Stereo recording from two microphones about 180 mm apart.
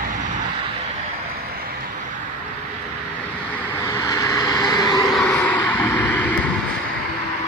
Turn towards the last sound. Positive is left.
turn(degrees=10)  # may be behind; listen again after turning